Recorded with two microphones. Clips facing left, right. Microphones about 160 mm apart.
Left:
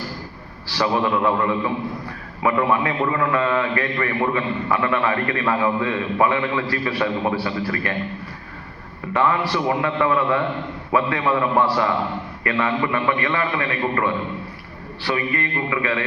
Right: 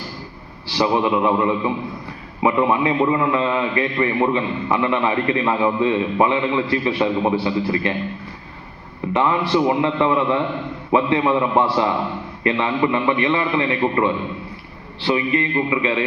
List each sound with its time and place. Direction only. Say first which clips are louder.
0.7 s a man's voice: right 2 dB; 20° right (ahead or behind)
9.1 s a man's voice: right 2 dB; 20° right (ahead or behind)